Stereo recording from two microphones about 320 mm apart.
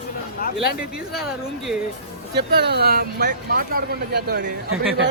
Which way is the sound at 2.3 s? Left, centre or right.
Right.